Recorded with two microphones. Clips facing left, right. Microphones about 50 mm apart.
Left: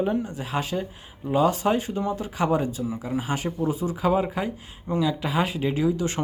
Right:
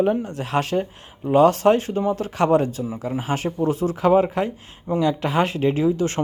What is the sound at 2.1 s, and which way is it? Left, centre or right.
Speech, right.